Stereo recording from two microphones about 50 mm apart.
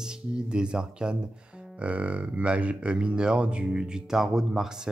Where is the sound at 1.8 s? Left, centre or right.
Right.